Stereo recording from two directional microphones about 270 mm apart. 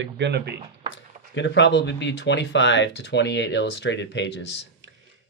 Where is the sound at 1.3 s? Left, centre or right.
Left.